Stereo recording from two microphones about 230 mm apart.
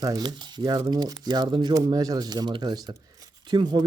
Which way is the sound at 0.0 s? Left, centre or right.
Centre.